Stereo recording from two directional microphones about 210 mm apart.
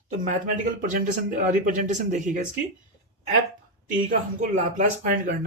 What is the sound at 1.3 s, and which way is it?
Speech, 40° right (ahead or behind).